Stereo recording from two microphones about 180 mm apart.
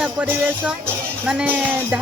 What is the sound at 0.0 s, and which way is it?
Music, 10° right (ahead or behind).